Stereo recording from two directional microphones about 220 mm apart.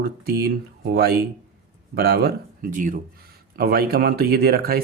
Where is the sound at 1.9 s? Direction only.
45° right (ahead or behind).